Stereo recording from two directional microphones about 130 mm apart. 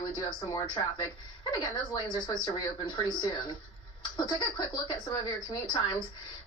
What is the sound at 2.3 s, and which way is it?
Speech, 35° left (ahead or behind).